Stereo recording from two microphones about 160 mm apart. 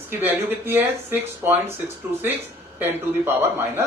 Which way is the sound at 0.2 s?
10° right (ahead or behind).